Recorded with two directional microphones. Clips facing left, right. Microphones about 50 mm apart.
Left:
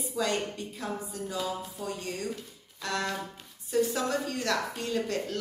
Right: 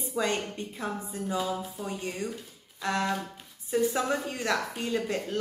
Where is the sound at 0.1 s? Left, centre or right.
Right.